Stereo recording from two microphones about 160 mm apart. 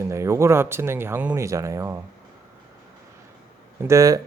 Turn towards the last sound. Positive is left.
turn(degrees=-20)  # may be behind; listen again after turning